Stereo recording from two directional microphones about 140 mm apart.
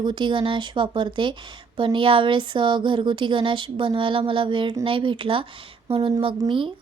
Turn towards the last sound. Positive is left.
turn(degrees=-35)  # may be behind; listen again after turning